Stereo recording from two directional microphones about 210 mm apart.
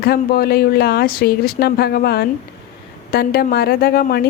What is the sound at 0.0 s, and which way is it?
A woman's voice, 45° left (ahead or behind).